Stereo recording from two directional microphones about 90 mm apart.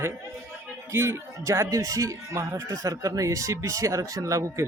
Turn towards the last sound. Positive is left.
turn(degrees=-35)  # may be behind; listen again after turning